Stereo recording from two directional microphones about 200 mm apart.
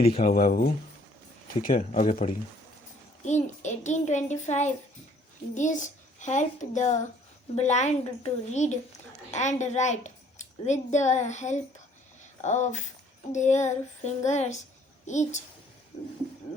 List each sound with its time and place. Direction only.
0.2 s a child's voice: 45° left (ahead or behind)